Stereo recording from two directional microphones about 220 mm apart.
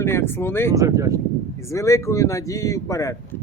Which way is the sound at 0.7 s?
15° right (ahead or behind).